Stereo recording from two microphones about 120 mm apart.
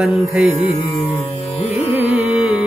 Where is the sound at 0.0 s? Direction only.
5° right (ahead or behind).